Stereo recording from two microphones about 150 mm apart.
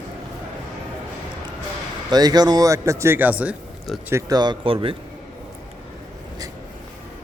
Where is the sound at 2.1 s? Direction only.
25° right (ahead or behind); by 3.6 s 10° right (ahead or behind).